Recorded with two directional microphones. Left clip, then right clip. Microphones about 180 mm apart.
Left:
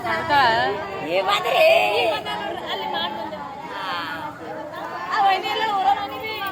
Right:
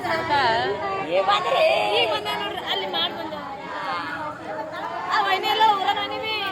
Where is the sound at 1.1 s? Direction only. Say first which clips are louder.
Left 1 dB; 65° left (ahead or behind).